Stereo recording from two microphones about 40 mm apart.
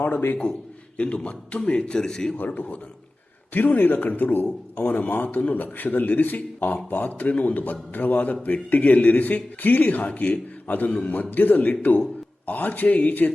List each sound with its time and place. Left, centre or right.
0.9 s a man's voice: left; by 2.3 s centre
2.6 s speech: left
10.1 s a man's voice: left
11.1 s speech: left